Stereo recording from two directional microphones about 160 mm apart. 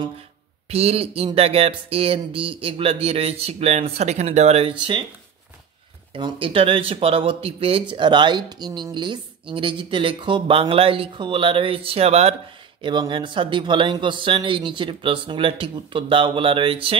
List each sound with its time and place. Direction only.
0.7 s speech: 40° right (ahead or behind)
6.1 s speech: 30° right (ahead or behind)